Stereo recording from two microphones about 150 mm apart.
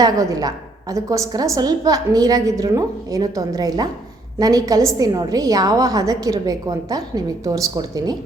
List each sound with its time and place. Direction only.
0.0 s a woman's voice: 25° right (ahead or behind)